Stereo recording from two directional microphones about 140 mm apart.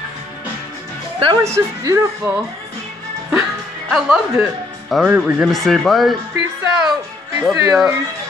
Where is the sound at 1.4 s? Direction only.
20° right (ahead or behind).